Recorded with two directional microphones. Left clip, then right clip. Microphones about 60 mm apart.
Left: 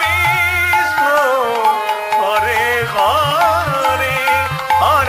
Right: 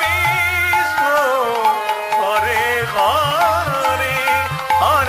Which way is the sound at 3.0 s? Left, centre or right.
Right.